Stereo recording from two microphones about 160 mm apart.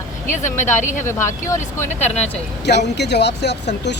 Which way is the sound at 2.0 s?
45° left (ahead or behind).